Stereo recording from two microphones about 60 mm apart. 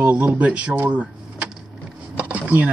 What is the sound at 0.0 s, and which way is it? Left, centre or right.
Speech, right.